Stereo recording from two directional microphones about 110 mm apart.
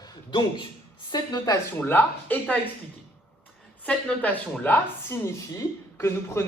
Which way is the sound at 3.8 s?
15° left (ahead or behind).